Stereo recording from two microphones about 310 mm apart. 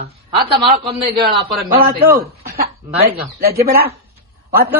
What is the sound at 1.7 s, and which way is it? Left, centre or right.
Speech, right.